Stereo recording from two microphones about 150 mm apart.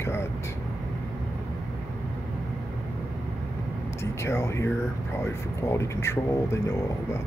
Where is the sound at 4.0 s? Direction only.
20° left (ahead or behind).